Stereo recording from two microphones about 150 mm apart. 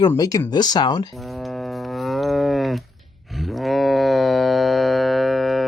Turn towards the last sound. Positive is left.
turn(degrees=0)  # may be behind; listen again after turning